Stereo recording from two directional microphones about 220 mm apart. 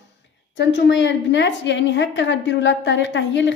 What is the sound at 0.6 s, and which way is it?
A woman's voice, 50° left (ahead or behind).